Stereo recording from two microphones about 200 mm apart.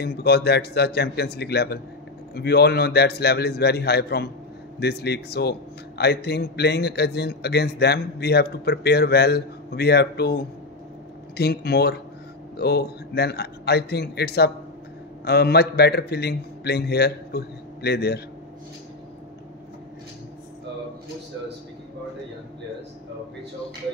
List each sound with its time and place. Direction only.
0.0 s a man's voice: 55° left (ahead or behind)